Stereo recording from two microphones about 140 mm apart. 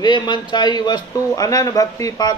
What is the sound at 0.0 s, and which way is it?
A man's voice, 30° left (ahead or behind).